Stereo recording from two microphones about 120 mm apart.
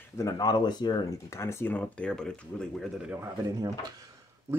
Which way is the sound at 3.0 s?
10° right (ahead or behind).